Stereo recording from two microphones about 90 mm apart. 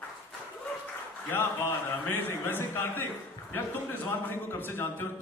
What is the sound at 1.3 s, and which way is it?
A man's voice, 25° left (ahead or behind).